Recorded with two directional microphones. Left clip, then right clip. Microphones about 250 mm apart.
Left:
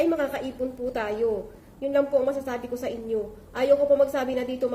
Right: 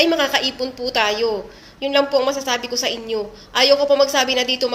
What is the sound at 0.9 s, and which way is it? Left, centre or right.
A woman's voice, right.